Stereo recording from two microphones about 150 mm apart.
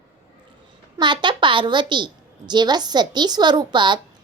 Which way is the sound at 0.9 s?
30° right (ahead or behind).